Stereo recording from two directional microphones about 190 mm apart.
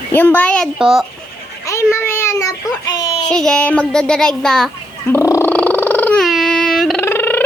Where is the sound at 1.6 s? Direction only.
15° left (ahead or behind).